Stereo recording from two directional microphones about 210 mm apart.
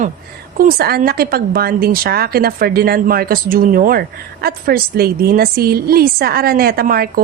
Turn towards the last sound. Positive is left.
turn(degrees=-45)  # may be behind; listen again after turning